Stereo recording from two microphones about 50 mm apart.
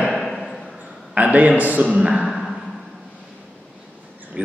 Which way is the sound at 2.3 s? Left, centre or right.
Centre.